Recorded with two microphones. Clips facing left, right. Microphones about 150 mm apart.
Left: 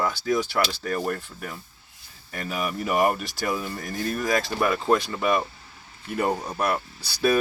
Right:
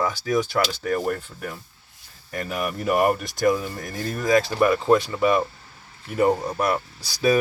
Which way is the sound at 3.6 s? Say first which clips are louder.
Even; 20° right (ahead or behind).